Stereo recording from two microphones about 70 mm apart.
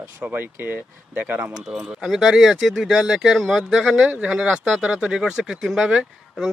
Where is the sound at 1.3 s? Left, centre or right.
Centre.